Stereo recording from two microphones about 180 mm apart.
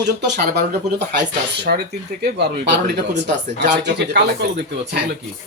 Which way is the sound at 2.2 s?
70° right (ahead or behind).